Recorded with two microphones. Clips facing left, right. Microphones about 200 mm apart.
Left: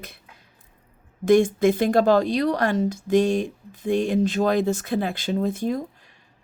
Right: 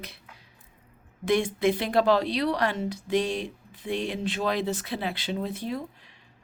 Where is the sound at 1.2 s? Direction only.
45° left (ahead or behind).